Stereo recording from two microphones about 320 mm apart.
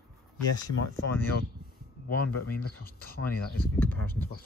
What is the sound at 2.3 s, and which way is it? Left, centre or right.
Speech, left.